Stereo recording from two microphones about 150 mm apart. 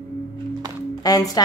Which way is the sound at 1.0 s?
25° left (ahead or behind).